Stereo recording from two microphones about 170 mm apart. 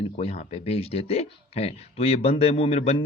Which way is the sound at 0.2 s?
35° left (ahead or behind).